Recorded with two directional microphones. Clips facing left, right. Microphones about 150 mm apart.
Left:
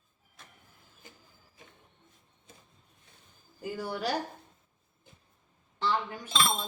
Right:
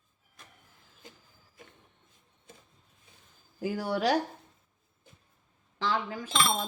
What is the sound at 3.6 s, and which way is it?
Speech, 90° right.